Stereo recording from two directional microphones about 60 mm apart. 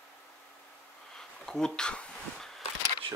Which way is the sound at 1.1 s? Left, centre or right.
Centre.